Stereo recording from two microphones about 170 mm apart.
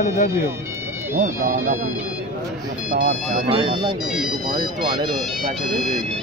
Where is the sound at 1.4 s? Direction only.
45° right (ahead or behind).